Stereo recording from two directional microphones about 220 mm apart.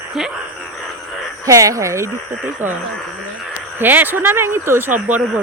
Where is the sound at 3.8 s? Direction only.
10° right (ahead or behind).